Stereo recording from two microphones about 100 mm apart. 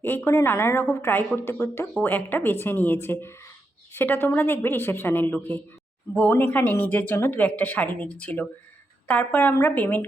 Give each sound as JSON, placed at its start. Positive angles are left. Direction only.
{"t": 0.0, "sound": "a woman's voice", "side_deg": 25}